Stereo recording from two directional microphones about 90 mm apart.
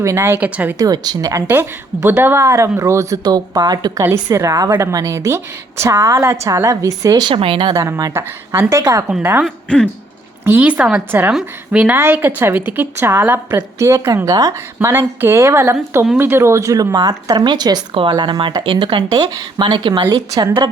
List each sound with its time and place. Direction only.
0.0 s a woman's voice: 35° right (ahead or behind)
0.3 s speech: 15° right (ahead or behind)
0.8 s a woman's voice: 45° right (ahead or behind)
1.5 s a woman's voice: 25° right (ahead or behind)
3.2 s speech: 45° right (ahead or behind)
4.1 s a woman's voice: 35° right (ahead or behind)
7.2 s speech: 70° right (ahead or behind)
7.7 s a woman's voice: 40° right (ahead or behind)
8.1 s a woman's voice: 25° right (ahead or behind)
9.4 s speech: 10° left (ahead or behind)
10.4 s a woman's voice: 20° right (ahead or behind)
11.9 s a woman's voice: 25° right (ahead or behind); by 19.0 s 70° right (ahead or behind)
19.1 s speech: 45° right (ahead or behind)